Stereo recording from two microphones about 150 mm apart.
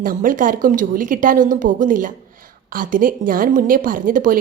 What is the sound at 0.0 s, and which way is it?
A woman's voice, 65° right (ahead or behind).